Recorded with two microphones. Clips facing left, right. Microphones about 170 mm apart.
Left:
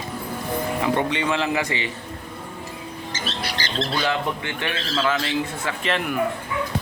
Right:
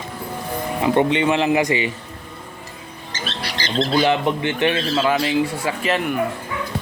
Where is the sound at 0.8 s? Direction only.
20° right (ahead or behind).